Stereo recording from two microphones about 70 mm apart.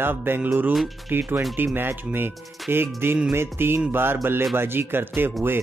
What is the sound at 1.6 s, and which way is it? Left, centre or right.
Music, right.